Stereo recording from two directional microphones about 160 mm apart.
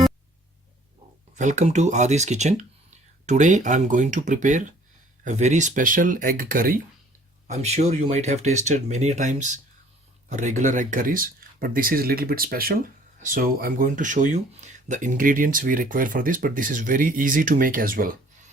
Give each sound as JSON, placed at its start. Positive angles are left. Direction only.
{"t": 1.4, "sound": "speech", "side_deg": -50}
{"t": 7.4, "sound": "speech", "side_deg": -45}